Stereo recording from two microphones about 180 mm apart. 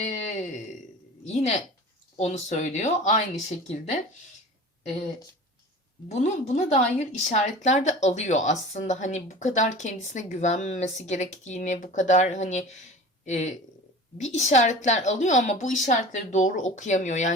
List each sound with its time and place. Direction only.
0.0 s a sound: 40° left (ahead or behind)
1.2 s a woman's voice: 40° left (ahead or behind)
6.1 s a woman's voice: 40° left (ahead or behind)